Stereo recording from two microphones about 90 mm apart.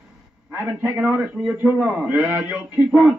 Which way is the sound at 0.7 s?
25° right (ahead or behind).